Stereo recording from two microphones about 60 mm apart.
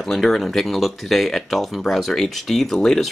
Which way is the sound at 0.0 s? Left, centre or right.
Centre.